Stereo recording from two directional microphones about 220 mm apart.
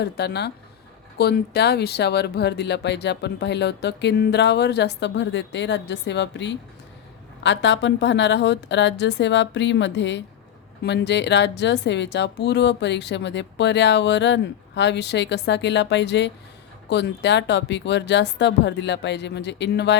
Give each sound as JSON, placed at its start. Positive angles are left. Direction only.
{"t": 0.0, "sound": "speech", "side_deg": 50}